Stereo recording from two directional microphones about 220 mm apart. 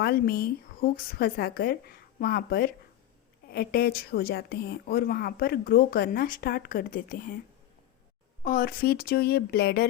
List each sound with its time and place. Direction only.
0.0 s speech: 45° left (ahead or behind)
8.4 s speech: 40° left (ahead or behind)